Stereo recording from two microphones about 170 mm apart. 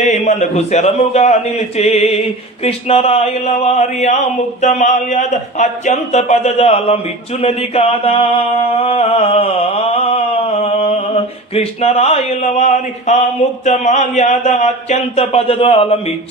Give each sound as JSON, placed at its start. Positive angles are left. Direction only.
{"t": 0.4, "sound": "a man's voice", "side_deg": 40}
{"t": 7.4, "sound": "a sound", "side_deg": 35}
{"t": 11.5, "sound": "a man's voice", "side_deg": 35}